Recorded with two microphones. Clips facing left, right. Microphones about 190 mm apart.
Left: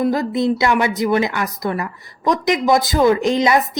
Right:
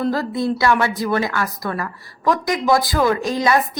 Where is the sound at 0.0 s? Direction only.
20° left (ahead or behind).